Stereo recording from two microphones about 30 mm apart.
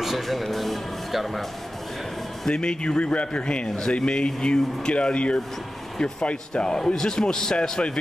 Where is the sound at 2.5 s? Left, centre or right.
Left.